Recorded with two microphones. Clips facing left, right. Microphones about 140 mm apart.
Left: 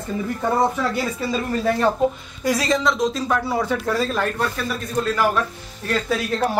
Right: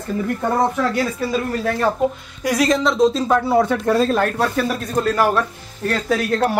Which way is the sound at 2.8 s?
25° right (ahead or behind).